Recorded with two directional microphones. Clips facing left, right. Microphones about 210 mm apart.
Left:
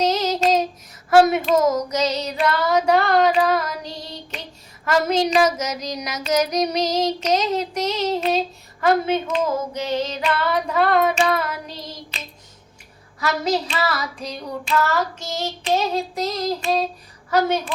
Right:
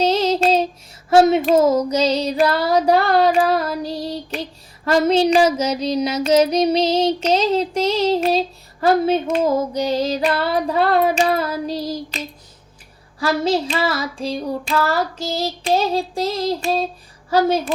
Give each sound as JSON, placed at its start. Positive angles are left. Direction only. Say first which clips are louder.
{"t": 0.0, "sound": "child singing", "louder": "right 3 dB", "side_deg": -30}
{"t": 1.5, "sound": "child singing", "louder": "right 4 dB", "side_deg": -30}
{"t": 8.2, "sound": "speech", "louder": "right 3 dB", "side_deg": -35}
{"t": 9.2, "sound": "female singing", "louder": "right 4 dB", "side_deg": -40}
{"t": 13.1, "sound": "child singing", "louder": "right 3 dB", "side_deg": -30}
{"t": 17.2, "sound": "a woman's voice", "louder": "right 3 dB", "side_deg": -30}